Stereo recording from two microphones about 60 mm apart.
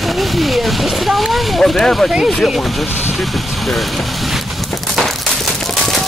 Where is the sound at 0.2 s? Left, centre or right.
Centre.